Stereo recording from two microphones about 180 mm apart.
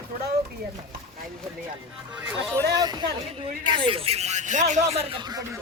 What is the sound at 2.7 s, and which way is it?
A man's voice, 25° right (ahead or behind).